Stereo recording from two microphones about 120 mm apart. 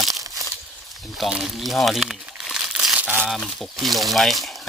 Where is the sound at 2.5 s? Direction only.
5° right (ahead or behind).